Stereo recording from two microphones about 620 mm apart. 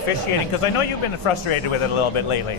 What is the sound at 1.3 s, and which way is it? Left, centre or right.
Speech, left.